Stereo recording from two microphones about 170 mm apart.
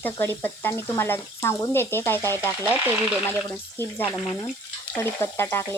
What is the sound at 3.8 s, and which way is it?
Speech, 10° left (ahead or behind).